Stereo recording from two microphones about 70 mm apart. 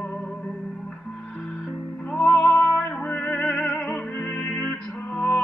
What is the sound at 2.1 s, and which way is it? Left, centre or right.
Music, centre.